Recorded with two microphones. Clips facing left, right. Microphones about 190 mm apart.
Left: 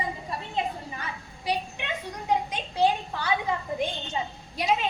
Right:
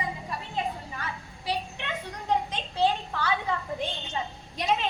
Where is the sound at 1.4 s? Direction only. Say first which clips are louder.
Left 2 dB; 15° left (ahead or behind).